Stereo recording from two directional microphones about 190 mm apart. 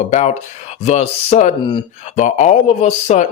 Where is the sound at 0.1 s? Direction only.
35° left (ahead or behind).